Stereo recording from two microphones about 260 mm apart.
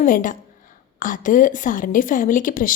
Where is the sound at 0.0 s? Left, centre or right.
Left.